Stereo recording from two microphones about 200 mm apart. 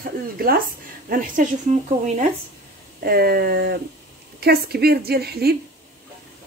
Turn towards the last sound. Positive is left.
turn(degrees=-50)  # may be behind; listen again after turning